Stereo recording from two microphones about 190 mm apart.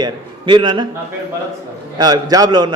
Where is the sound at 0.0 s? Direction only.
25° right (ahead or behind).